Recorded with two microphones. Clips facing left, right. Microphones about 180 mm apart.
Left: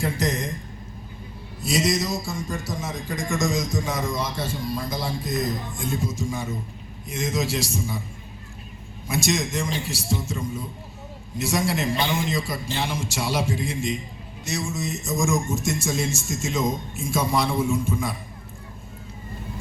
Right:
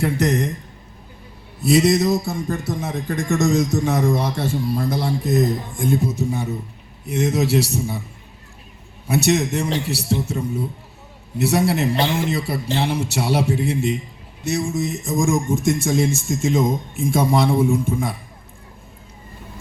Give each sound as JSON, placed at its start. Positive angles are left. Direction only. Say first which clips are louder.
{"t": 0.0, "sound": "a man's voice", "louder": "right 6 dB", "side_deg": -65}
{"t": 1.6, "sound": "a man's voice", "louder": "right 8 dB", "side_deg": -60}
{"t": 9.0, "sound": "a man's voice", "louder": "right 6 dB", "side_deg": -65}